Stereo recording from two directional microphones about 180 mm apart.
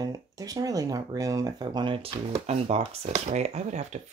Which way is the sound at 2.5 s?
35° right (ahead or behind).